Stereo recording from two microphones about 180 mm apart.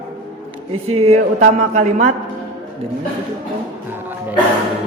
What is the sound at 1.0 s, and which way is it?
Speech, 35° right (ahead or behind).